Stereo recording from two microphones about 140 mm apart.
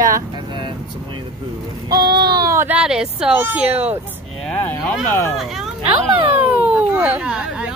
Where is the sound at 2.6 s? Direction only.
5° right (ahead or behind).